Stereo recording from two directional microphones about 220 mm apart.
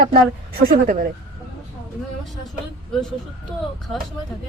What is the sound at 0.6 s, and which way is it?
Speech, 35° right (ahead or behind).